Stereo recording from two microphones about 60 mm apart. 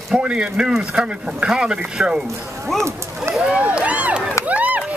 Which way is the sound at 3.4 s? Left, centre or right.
Centre.